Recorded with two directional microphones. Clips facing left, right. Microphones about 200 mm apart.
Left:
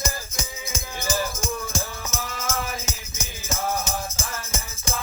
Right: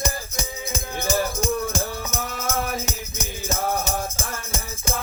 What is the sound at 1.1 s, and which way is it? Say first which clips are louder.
Music: right 4 dB; 60° right (ahead or behind).